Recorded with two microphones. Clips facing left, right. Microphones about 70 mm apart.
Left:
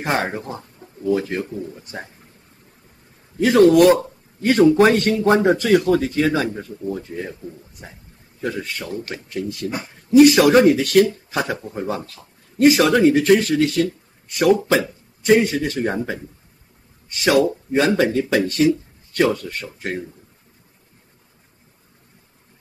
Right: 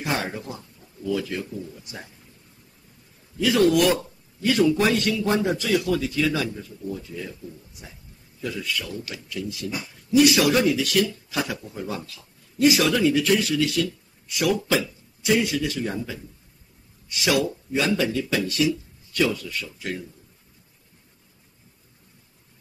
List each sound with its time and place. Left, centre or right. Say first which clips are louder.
0.0 s speech: left 5 dB; left
3.3 s speech: left 7 dB; left